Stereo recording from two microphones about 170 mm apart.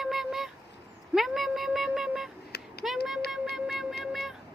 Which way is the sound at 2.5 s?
70° left (ahead or behind).